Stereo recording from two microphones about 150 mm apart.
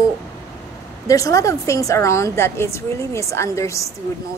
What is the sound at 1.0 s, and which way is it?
A woman's voice, 20° left (ahead or behind).